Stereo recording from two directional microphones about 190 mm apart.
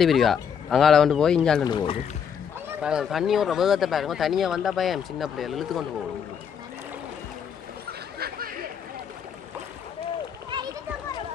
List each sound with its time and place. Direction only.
0.0 s speech: centre (ahead or behind)
1.6 s speech: 25° left (ahead or behind)
2.8 s speech: 5° right (ahead or behind)
10.5 s children playing: 25° right (ahead or behind)